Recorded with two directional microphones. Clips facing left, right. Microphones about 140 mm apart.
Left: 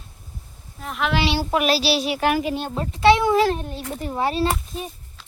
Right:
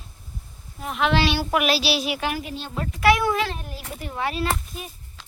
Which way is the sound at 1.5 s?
35° left (ahead or behind).